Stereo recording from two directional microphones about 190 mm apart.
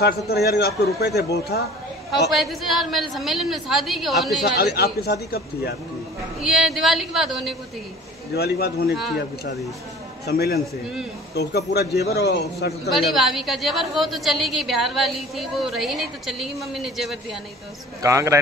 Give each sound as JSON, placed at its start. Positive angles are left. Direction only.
{"t": 0.0, "sound": "a man's voice", "side_deg": 55}
{"t": 2.3, "sound": "a woman's voice", "side_deg": 0}
{"t": 4.7, "sound": "a man's voice", "side_deg": 55}
{"t": 6.4, "sound": "a woman's voice", "side_deg": 0}
{"t": 8.4, "sound": "a man's voice", "side_deg": 55}
{"t": 10.2, "sound": "a man's voice", "side_deg": 55}
{"t": 12.9, "sound": "a woman's voice", "side_deg": 0}
{"t": 18.0, "sound": "a man's voice", "side_deg": -15}